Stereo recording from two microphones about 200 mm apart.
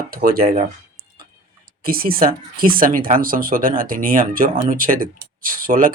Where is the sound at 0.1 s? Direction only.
45° right (ahead or behind).